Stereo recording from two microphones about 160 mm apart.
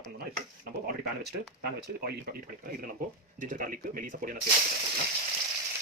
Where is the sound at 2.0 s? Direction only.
70° right (ahead or behind).